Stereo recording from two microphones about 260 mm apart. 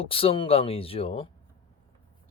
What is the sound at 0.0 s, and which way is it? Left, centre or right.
Speech, left.